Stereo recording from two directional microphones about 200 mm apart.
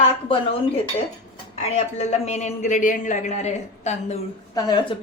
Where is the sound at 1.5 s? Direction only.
30° left (ahead or behind).